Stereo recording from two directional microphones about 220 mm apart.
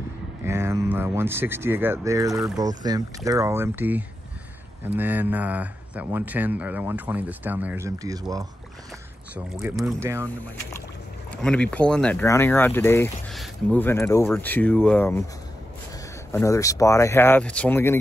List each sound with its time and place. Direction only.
0.4 s speech: 10° right (ahead or behind)
11.4 s speech: 5° left (ahead or behind)
16.3 s speech: 15° left (ahead or behind)